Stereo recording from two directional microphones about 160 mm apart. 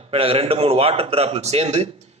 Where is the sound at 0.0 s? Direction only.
35° right (ahead or behind).